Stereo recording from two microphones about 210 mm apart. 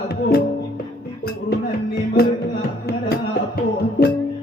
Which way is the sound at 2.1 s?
50° left (ahead or behind).